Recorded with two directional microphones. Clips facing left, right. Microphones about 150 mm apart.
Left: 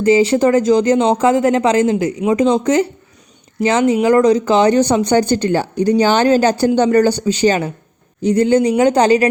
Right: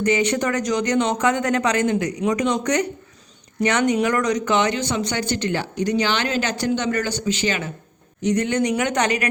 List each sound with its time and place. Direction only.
0.0 s speech: 30° left (ahead or behind)